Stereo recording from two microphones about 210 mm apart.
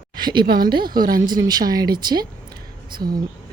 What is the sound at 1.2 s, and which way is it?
A woman's voice, 20° right (ahead or behind).